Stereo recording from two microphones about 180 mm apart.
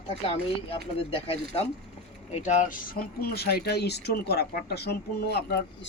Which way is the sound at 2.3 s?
40° left (ahead or behind).